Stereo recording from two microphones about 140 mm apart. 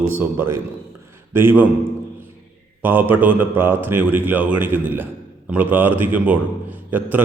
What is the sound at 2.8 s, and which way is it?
A man's voice, 15° right (ahead or behind).